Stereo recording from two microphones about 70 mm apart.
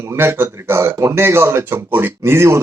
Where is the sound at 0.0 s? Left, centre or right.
Right.